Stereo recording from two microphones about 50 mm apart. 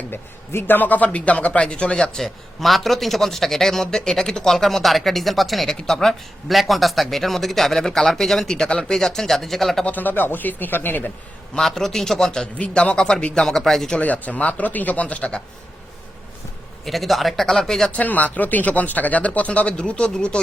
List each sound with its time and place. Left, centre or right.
0.1 s a man's voice: left; by 9.8 s centre
9.8 s speech: left
11.6 s a man's voice: centre
12.5 s a man's voice: left; by 13.9 s centre
14.0 s speech: left
16.8 s speech: centre
17.4 s a man's voice: centre
17.9 s speech: left